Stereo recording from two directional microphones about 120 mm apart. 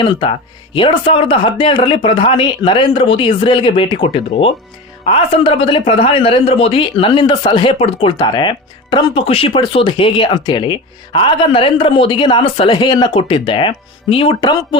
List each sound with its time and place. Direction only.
0.0 s speech: 45° left (ahead or behind)
12.8 s speech: 35° left (ahead or behind)
13.1 s speech: 50° left (ahead or behind)